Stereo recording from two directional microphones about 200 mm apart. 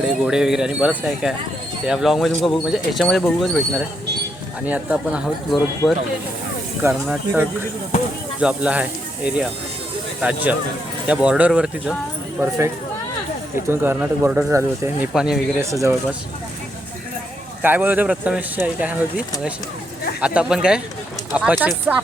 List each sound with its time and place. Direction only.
0.1 s speech: 5° right (ahead or behind)
6.8 s speech: 10° right (ahead or behind)
15.7 s speech: 15° right (ahead or behind)
17.6 s speech: 10° right (ahead or behind)